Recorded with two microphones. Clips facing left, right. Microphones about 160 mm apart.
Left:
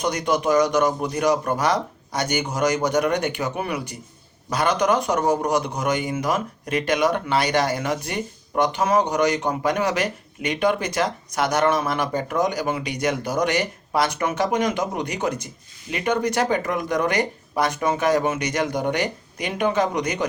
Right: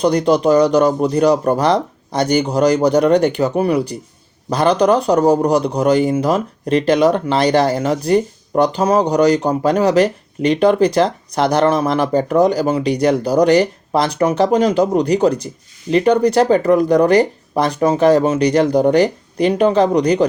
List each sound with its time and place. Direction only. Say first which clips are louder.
0.0 s a man's voice: right 9 dB; 35° right (ahead or behind)